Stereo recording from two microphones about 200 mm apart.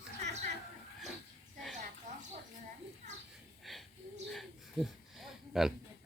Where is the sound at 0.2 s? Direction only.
35° right (ahead or behind).